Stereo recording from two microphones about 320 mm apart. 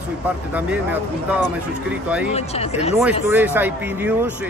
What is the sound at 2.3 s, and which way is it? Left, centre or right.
Speech, centre.